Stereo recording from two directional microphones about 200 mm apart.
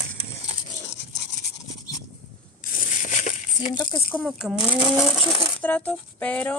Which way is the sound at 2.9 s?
40° left (ahead or behind).